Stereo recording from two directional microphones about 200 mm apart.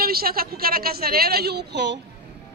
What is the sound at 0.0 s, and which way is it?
A woman's voice, 50° right (ahead or behind).